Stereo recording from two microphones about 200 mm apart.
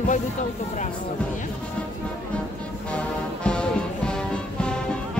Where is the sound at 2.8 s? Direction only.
5° left (ahead or behind).